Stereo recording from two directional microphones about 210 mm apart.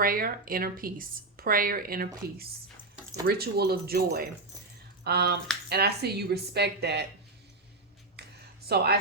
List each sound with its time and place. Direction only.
0.0 s speech: 45° right (ahead or behind)
3.2 s speech: 50° right (ahead or behind)
8.6 s speech: 50° right (ahead or behind)